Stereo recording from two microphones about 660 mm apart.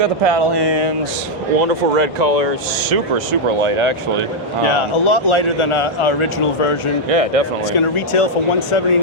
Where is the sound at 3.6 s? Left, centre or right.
Right.